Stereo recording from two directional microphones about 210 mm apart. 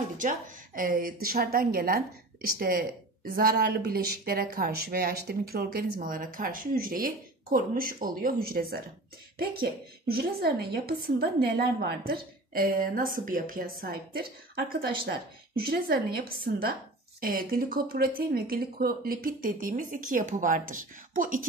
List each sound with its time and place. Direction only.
0.2 s a woman's voice: 40° right (ahead or behind)
16.3 s a woman's voice: 45° right (ahead or behind)